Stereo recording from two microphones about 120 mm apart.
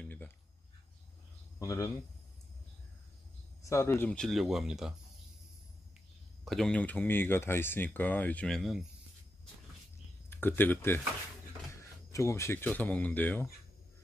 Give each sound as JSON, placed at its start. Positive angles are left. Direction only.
{"t": 0.0, "sound": "a sound", "side_deg": 15}
{"t": 1.6, "sound": "speech", "side_deg": 25}
{"t": 3.6, "sound": "speech", "side_deg": 25}
{"t": 4.2, "sound": "speech", "side_deg": 0}
{"t": 6.4, "sound": "speech", "side_deg": 5}
{"t": 10.3, "sound": "speech", "side_deg": 15}
{"t": 12.1, "sound": "speech", "side_deg": 25}